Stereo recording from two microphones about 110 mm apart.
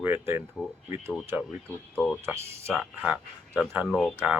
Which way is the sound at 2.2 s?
25° right (ahead or behind).